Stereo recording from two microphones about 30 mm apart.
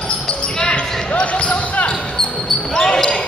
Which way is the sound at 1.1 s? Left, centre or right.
Left.